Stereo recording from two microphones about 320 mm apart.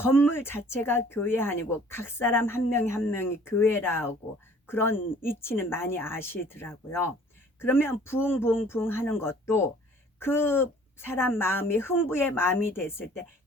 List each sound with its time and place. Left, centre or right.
0.0 s speech: centre